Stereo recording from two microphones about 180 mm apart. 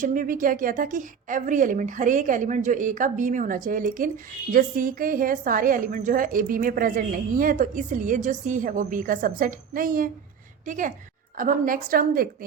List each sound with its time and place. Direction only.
0.0 s a woman's voice: 50° right (ahead or behind)